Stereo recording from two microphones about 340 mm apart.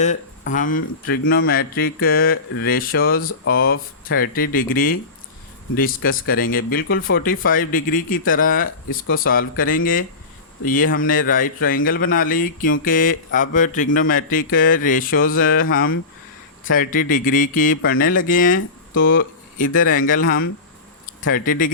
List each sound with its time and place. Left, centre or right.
0.0 s speech: left